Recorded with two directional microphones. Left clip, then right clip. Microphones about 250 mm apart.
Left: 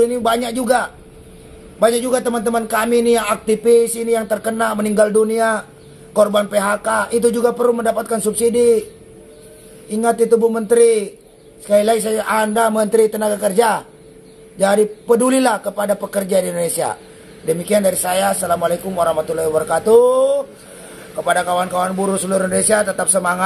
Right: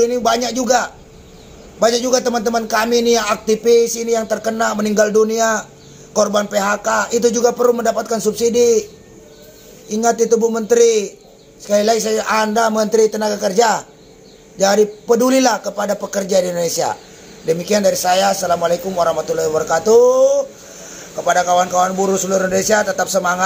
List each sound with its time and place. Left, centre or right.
0.0 s a man's voice: centre
9.9 s a man's voice: centre